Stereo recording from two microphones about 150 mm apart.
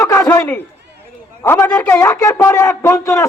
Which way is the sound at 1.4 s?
15° left (ahead or behind).